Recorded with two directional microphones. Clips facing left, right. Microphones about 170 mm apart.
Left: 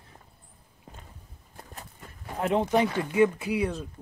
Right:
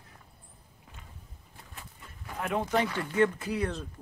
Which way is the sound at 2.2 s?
25° left (ahead or behind).